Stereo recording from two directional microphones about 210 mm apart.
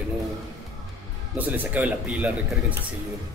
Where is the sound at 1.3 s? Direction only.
10° right (ahead or behind).